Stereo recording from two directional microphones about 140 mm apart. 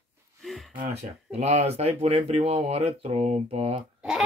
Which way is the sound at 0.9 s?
50° right (ahead or behind).